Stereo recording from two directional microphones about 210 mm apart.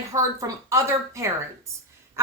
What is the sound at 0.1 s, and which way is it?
A woman's voice, 15° right (ahead or behind).